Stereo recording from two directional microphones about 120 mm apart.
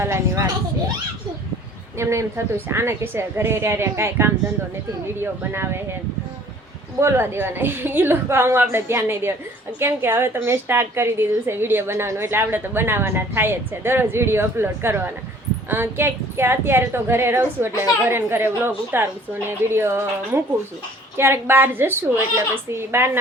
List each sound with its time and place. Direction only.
0.0 s a woman's voice: 20° right (ahead or behind)
2.0 s a woman's voice: 25° right (ahead or behind)
7.0 s a woman's voice: 20° right (ahead or behind)